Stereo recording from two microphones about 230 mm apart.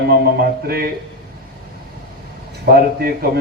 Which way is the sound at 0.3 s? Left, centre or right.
Right.